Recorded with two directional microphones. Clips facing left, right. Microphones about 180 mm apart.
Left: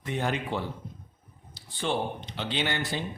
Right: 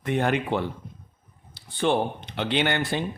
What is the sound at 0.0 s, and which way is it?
Speech, 60° right (ahead or behind).